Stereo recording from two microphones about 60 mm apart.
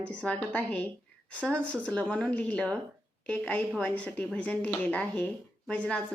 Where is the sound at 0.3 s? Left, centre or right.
Centre.